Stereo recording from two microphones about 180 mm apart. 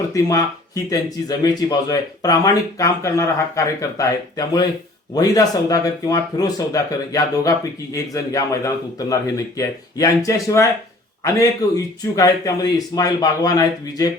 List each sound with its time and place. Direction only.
0.1 s speech: 20° left (ahead or behind)
7.9 s speech: 20° left (ahead or behind)